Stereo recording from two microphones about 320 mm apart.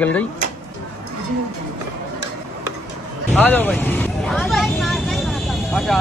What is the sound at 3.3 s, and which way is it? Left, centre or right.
Speech, centre.